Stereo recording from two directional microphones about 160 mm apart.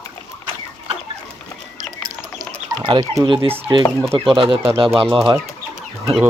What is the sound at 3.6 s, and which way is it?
Speech, 30° right (ahead or behind).